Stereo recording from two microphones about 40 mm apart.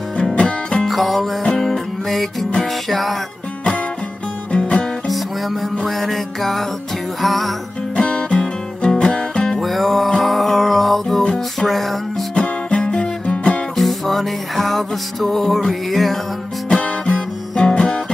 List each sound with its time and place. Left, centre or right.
0.4 s music: left
0.8 s music: centre
4.5 s music: left
5.0 s music: centre
7.9 s music: left
9.6 s music: centre
12.4 s music: left
13.7 s music: centre
16.7 s music: centre
17.6 s guitar: centre